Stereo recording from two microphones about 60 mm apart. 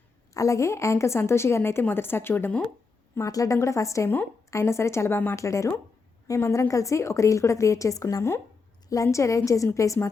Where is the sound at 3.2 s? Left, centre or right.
Left.